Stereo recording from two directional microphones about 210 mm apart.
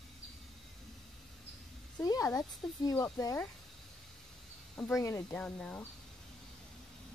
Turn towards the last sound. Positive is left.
turn(degrees=5)  # may be behind; listen again after turning